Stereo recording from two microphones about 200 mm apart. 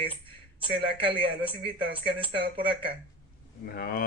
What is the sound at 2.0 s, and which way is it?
Speech, 25° right (ahead or behind).